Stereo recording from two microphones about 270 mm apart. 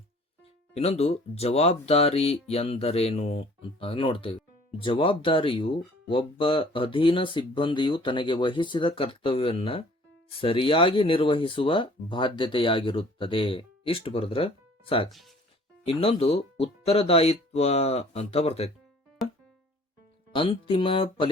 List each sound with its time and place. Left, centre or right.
0.7 s speech: left
20.3 s speech: centre